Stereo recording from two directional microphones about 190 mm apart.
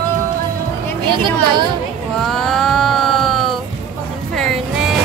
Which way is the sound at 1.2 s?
25° right (ahead or behind).